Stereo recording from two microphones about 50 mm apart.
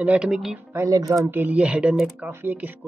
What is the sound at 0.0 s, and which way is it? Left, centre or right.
Speech, right.